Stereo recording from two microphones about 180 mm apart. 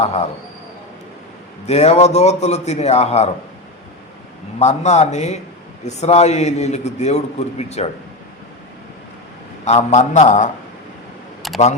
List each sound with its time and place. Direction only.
0.0 s a man's voice: 35° left (ahead or behind)
1.6 s a man's voice: 35° left (ahead or behind)
4.6 s a man's voice: 40° left (ahead or behind)
9.6 s a man's voice: 40° left (ahead or behind)
11.4 s a sound: centre (ahead or behind)